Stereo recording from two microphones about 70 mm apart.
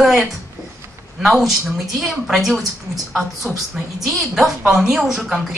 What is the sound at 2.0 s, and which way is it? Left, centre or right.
A woman's voice, centre.